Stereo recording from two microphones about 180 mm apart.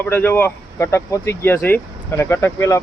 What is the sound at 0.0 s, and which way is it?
Speech, 10° left (ahead or behind).